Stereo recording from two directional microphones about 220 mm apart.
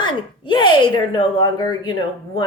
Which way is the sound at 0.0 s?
20° left (ahead or behind).